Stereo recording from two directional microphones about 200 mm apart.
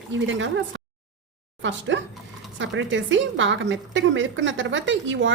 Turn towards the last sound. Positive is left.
turn(degrees=-70)  # may be behind; listen again after turning